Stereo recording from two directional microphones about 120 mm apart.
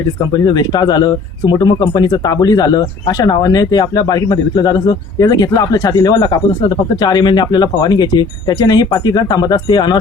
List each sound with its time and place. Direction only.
0.3 s speech: 35° left (ahead or behind)